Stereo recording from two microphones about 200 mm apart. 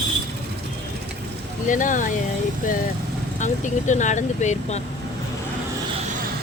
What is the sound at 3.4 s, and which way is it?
Speech, 40° left (ahead or behind).